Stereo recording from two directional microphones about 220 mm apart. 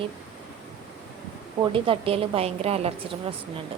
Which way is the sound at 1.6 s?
25° right (ahead or behind).